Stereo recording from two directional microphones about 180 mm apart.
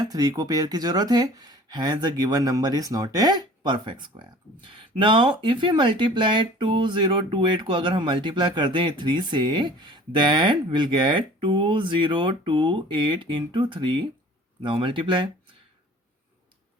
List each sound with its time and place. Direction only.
0.0 s speech: 20° right (ahead or behind)